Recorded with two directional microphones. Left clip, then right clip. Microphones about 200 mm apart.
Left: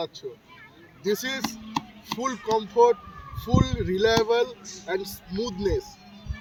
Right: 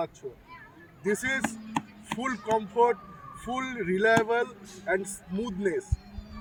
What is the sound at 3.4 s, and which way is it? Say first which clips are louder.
Speech: left 4 dB; 5° right (ahead or behind).